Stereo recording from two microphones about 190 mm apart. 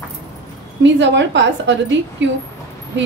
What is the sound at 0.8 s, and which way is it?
Speech, 70° right (ahead or behind).